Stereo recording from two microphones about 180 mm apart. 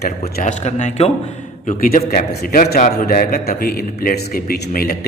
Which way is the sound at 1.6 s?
50° left (ahead or behind).